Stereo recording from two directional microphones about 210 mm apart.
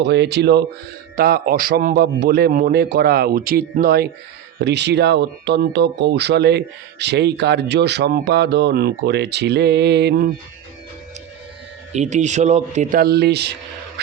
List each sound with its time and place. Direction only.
0.0 s speech: 55° right (ahead or behind)
11.9 s speech: 35° right (ahead or behind); by 13.5 s 50° right (ahead or behind)